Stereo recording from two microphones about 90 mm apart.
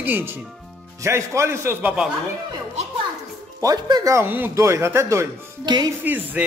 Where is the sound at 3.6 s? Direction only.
45° right (ahead or behind).